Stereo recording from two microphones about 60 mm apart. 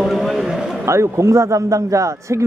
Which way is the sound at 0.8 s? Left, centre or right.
Right.